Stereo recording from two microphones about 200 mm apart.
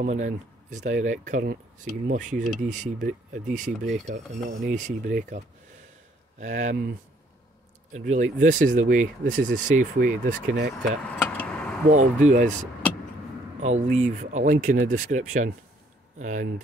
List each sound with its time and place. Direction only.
0.0 s speech: 35° right (ahead or behind)
6.4 s speech: 35° right (ahead or behind)
7.9 s speech: 40° right (ahead or behind)
10.5 s speech: 55° right (ahead or behind)
11.1 s vehicle: 5° left (ahead or behind)
12.2 s speech: 35° right (ahead or behind)
13.6 s speech: 35° right (ahead or behind)